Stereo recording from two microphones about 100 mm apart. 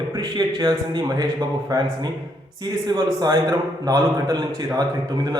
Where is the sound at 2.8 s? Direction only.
40° right (ahead or behind).